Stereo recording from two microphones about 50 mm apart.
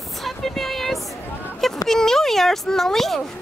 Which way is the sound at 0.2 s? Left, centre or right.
Centre.